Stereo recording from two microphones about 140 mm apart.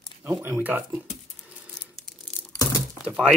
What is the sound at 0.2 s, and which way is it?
Speech, 15° right (ahead or behind).